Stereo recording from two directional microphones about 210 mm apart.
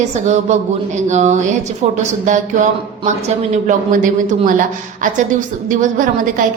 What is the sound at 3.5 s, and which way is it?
A woman's voice, 40° right (ahead or behind).